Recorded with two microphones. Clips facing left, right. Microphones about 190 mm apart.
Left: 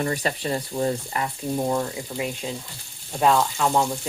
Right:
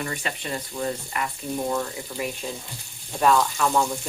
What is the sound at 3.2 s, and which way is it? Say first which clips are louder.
Frying: left 1 dB; 20° left (ahead or behind).